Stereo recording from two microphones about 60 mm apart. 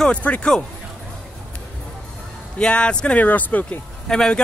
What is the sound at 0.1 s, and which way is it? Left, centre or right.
Speech, left.